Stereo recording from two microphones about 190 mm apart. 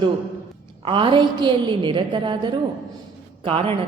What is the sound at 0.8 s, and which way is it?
A woman's voice, 25° right (ahead or behind).